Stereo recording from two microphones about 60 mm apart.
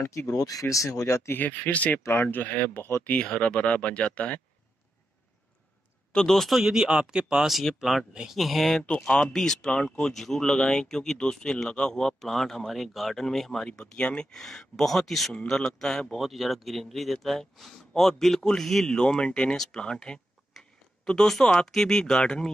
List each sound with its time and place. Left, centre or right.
0.0 s speech: left
1.3 s speech: left
6.1 s speech: centre
6.6 s speech: centre
7.5 s speech: centre
8.1 s speech: centre
8.4 s speech: centre
8.8 s speech: centre